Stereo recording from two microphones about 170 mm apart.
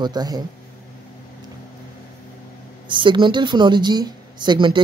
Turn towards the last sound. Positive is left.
turn(degrees=-25)  # may be behind; listen again after turning